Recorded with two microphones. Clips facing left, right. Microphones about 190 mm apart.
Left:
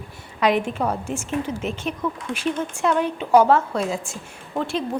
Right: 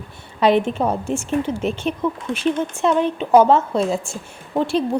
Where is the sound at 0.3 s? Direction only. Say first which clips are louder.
Right 4 dB; 30° right (ahead or behind).